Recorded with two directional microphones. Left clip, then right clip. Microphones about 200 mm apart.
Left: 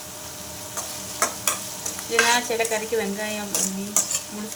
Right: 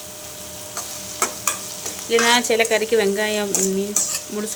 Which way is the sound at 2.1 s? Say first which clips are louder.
Right 4 dB; 40° right (ahead or behind).